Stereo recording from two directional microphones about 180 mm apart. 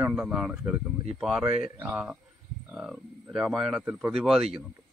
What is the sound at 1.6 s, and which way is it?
A man's voice, 10° right (ahead or behind).